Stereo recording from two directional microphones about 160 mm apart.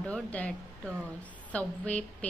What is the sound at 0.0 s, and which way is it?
A woman's voice, 10° left (ahead or behind).